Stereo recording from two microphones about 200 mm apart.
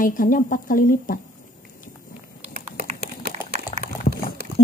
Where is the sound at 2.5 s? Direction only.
50° right (ahead or behind).